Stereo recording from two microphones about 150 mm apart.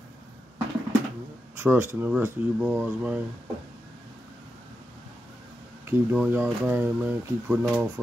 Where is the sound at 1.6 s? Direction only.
15° right (ahead or behind).